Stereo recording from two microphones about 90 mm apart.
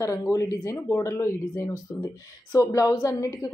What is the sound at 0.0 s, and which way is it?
Speech, 40° left (ahead or behind).